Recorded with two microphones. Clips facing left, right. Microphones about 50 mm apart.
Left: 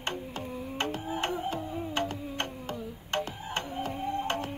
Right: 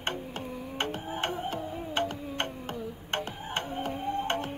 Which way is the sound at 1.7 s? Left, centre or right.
Right.